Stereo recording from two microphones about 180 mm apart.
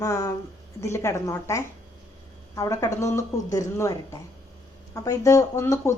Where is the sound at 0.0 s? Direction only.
20° left (ahead or behind).